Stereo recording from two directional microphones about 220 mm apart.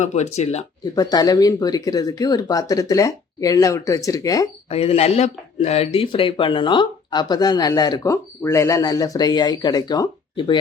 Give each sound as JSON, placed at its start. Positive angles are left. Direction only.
{"t": 0.0, "sound": "speech", "side_deg": 30}
{"t": 0.9, "sound": "speech", "side_deg": 15}
{"t": 4.7, "sound": "speech", "side_deg": 25}